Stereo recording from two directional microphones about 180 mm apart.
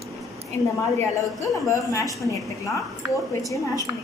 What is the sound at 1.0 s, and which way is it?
A woman's voice, 15° left (ahead or behind).